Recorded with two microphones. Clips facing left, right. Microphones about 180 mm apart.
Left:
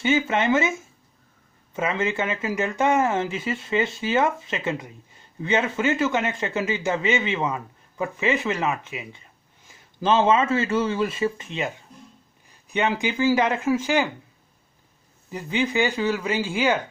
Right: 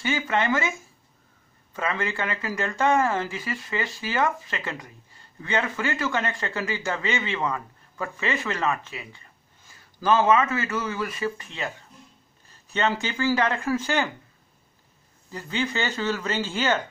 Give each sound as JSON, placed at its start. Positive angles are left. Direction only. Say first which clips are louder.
{"t": 0.0, "sound": "speech", "louder": "left 4 dB", "side_deg": 20}
{"t": 15.3, "sound": "speech", "louder": "left 4 dB", "side_deg": 15}